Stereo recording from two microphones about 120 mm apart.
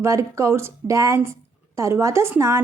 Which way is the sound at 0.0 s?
25° right (ahead or behind).